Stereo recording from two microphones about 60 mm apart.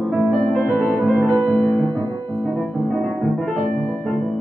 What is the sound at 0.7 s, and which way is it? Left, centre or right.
Music, centre.